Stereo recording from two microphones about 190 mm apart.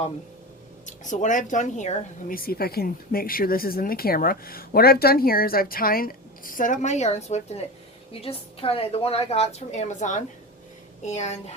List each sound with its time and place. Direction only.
0.9 s a woman's voice: 40° left (ahead or behind)